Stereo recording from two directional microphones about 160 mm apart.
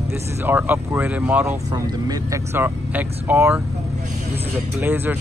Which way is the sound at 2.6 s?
10° right (ahead or behind).